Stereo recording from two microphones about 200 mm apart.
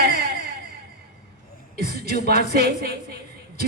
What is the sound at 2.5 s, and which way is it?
Speech, 50° right (ahead or behind).